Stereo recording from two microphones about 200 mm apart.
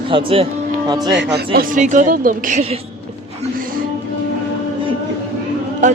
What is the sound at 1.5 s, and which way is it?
A woman's voice, 40° right (ahead or behind).